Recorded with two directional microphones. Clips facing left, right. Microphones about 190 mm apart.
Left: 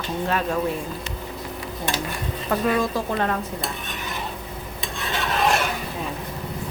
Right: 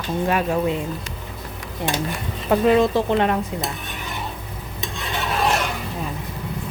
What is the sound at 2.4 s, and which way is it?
Speech, 25° right (ahead or behind).